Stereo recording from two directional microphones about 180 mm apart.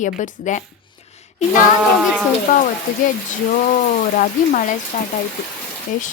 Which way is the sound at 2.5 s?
40° left (ahead or behind).